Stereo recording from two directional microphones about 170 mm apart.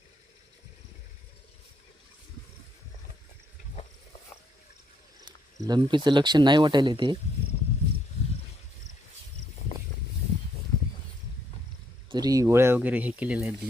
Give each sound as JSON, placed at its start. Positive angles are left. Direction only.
{"t": 5.5, "sound": "speech", "side_deg": -25}
{"t": 12.1, "sound": "speech", "side_deg": -20}